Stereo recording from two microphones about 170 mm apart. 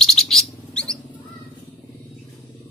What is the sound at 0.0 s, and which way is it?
Bird, centre (ahead or behind).